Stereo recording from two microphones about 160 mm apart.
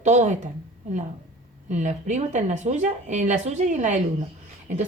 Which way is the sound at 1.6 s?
50° right (ahead or behind).